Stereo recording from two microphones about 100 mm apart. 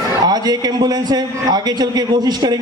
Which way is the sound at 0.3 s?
45° right (ahead or behind).